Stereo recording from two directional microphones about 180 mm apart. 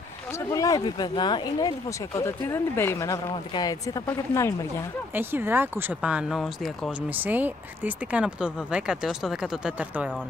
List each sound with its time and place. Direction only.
0.5 s speech: 20° left (ahead or behind)
5.1 s speech: 10° right (ahead or behind)